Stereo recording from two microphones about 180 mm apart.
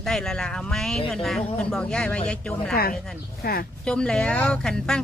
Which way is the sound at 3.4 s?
60° left (ahead or behind).